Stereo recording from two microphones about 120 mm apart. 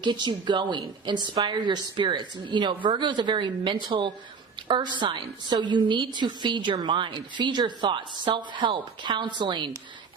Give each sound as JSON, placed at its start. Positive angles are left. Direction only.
{"t": 0.0, "sound": "a woman's voice", "side_deg": -40}